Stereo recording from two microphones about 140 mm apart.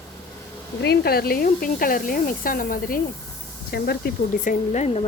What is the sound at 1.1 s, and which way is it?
Speech, 90° left.